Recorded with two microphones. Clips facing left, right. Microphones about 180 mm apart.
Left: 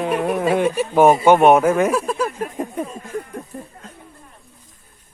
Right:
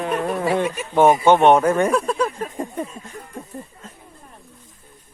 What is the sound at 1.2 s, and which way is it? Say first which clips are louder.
Speech: left 2 dB; 10° left (ahead or behind).